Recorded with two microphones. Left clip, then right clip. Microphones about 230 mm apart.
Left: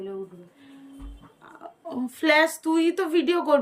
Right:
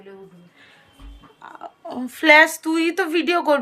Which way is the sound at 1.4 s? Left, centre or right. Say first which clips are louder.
Right 5 dB; centre.